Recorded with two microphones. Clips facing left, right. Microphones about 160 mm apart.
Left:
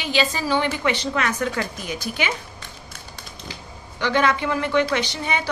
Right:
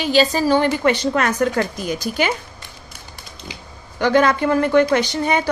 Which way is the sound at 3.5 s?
15° right (ahead or behind).